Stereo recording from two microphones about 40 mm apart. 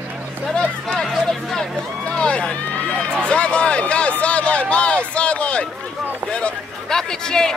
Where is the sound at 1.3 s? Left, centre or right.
Centre.